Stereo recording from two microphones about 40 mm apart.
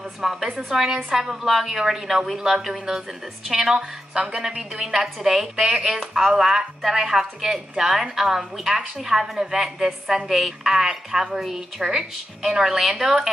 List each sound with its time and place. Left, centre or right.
0.2 s a woman's voice: centre
3.7 s a woman's voice: right